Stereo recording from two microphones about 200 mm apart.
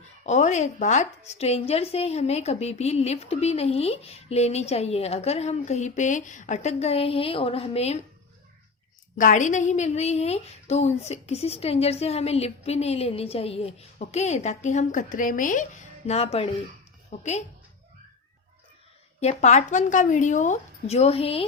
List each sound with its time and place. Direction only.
0.3 s a woman's voice: 35° left (ahead or behind)
9.1 s a woman's voice: 40° left (ahead or behind)
16.0 s a woman's voice: 30° left (ahead or behind)
19.2 s a woman's voice: 35° left (ahead or behind)